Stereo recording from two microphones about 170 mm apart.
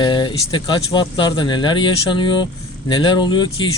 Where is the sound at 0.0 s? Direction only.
25° left (ahead or behind).